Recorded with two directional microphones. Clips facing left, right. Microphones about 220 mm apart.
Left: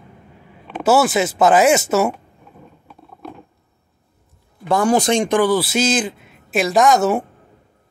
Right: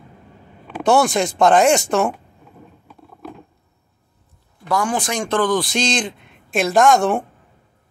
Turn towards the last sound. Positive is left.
turn(degrees=5)  # may be behind; listen again after turning